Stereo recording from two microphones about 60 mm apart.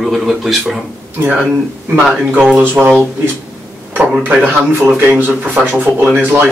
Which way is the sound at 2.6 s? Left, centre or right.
Right.